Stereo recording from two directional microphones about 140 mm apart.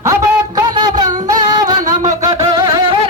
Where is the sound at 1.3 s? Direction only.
30° right (ahead or behind).